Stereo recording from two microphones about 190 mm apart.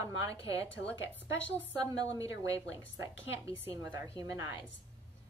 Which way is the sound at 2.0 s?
15° right (ahead or behind).